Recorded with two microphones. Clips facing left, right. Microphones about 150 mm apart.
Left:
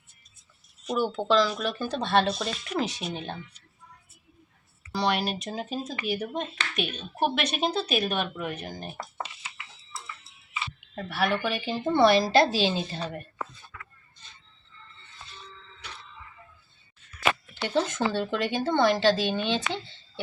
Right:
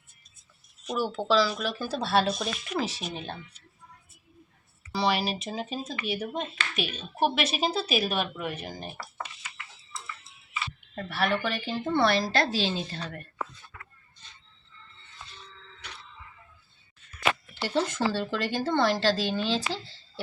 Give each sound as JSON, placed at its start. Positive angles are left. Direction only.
{"t": 0.9, "sound": "speech", "side_deg": 0}
{"t": 4.9, "sound": "speech", "side_deg": 0}
{"t": 9.0, "sound": "a sound", "side_deg": 15}
{"t": 10.9, "sound": "speech", "side_deg": 0}
{"t": 11.7, "sound": "a woman's voice", "side_deg": 15}
{"t": 17.2, "sound": "speech", "side_deg": 0}